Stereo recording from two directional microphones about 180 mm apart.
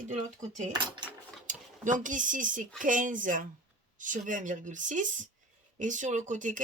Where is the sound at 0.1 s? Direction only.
40° right (ahead or behind).